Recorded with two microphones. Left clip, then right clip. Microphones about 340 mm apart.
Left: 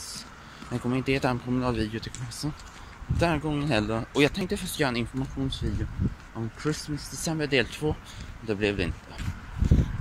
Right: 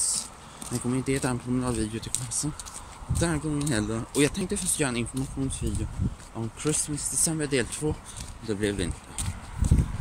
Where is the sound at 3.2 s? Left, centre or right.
Centre.